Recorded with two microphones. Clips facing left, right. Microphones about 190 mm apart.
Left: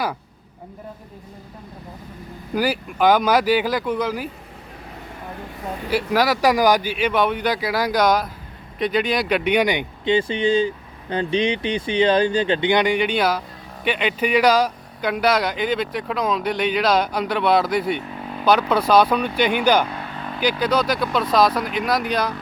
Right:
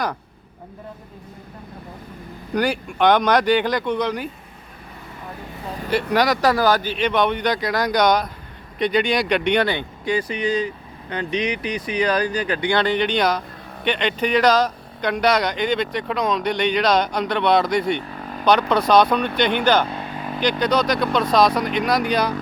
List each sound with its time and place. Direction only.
2.5 s speech: 5° left (ahead or behind)
5.9 s speech: 5° left (ahead or behind)